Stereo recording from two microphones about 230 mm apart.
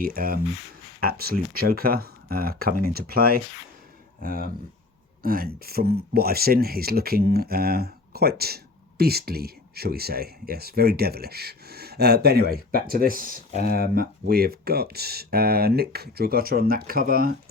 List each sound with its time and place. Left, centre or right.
0.0 s speech: right